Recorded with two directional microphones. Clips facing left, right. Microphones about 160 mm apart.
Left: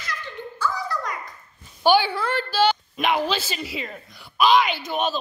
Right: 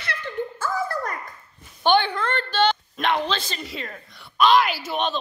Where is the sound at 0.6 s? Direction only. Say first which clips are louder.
Left 3 dB; 50° right (ahead or behind).